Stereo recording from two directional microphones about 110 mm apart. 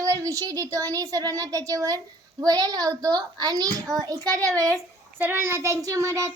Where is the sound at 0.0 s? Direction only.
30° right (ahead or behind).